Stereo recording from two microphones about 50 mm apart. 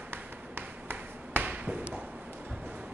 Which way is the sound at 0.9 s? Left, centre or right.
Right.